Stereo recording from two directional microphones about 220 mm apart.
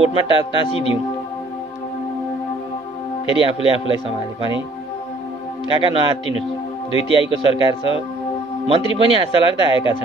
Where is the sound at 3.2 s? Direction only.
25° left (ahead or behind).